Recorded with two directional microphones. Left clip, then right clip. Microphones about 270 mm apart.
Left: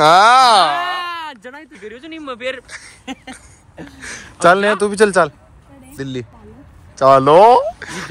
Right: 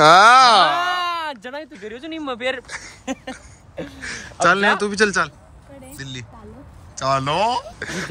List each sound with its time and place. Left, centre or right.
0.0 s a sound: centre
1.8 s speech: right
3.8 s speech: centre